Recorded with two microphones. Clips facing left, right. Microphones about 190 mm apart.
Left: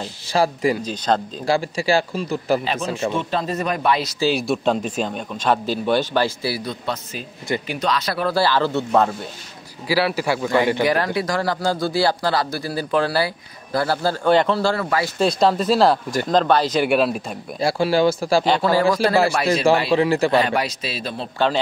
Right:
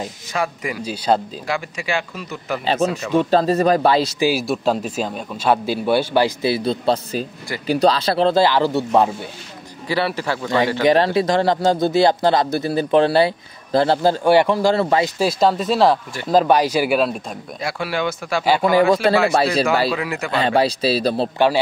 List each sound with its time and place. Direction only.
0.0 s speech: 30° left (ahead or behind)
0.8 s a man's voice: 10° right (ahead or behind)
1.5 s speech: 35° left (ahead or behind)
2.6 s speech: 30° right (ahead or behind)
4.2 s a man's voice: 5° right (ahead or behind)
9.8 s speech: 5° left (ahead or behind)
10.8 s speech: 25° right (ahead or behind)
14.8 s speech: 25° right (ahead or behind)
15.1 s a man's voice: 5° right (ahead or behind)
17.6 s speech: 30° left (ahead or behind)
18.4 s a man's voice: 10° right (ahead or behind)
19.3 s speech: 30° right (ahead or behind)
19.9 s speech: 30° left (ahead or behind)
20.3 s speech: 30° right (ahead or behind)